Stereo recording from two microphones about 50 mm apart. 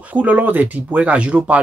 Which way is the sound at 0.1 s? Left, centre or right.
Right.